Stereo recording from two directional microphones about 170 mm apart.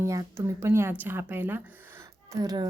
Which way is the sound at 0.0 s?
20° right (ahead or behind).